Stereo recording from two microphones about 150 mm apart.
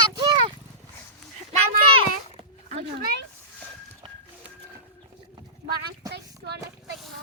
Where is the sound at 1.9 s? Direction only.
40° right (ahead or behind).